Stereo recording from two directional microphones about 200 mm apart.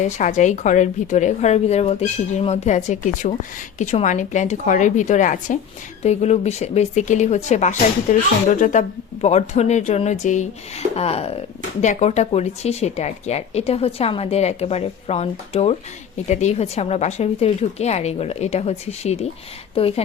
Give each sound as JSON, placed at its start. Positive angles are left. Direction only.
{"t": 0.0, "sound": "speech", "side_deg": 35}